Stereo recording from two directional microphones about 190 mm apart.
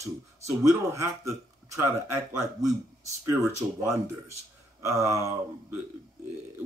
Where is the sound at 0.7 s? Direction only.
15° right (ahead or behind).